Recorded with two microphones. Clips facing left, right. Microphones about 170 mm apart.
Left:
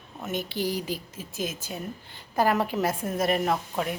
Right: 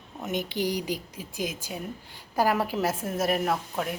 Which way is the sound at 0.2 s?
15° right (ahead or behind).